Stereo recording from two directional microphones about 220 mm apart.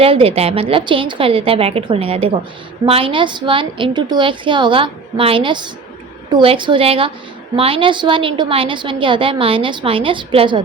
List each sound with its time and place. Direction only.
0.0 s a woman's voice: 25° right (ahead or behind)